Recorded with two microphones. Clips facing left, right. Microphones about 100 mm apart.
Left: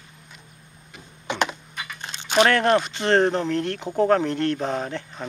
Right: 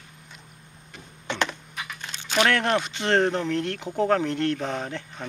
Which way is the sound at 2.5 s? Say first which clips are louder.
Left 4 dB; 40° left (ahead or behind).